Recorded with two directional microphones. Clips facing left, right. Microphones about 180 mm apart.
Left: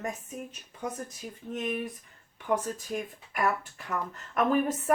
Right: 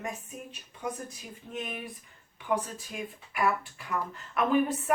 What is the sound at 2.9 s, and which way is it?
Speech, 45° left (ahead or behind).